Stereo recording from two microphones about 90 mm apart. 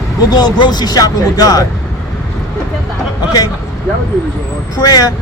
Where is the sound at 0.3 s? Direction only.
50° left (ahead or behind).